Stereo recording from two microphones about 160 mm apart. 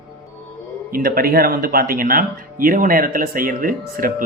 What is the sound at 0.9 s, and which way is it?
Speech, 65° right (ahead or behind).